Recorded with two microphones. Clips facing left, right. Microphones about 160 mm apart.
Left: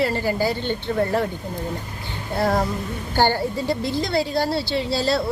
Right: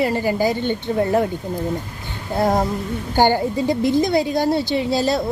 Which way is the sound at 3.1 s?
15° right (ahead or behind).